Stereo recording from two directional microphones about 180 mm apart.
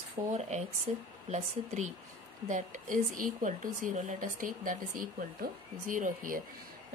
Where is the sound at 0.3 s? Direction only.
40° right (ahead or behind).